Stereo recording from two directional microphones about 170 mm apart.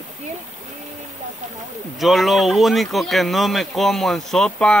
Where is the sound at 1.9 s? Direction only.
Centre (ahead or behind).